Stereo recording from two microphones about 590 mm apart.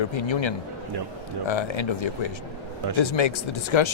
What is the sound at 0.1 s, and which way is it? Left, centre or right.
Speech, left.